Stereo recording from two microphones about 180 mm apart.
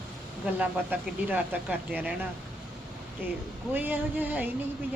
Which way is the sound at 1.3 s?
10° right (ahead or behind).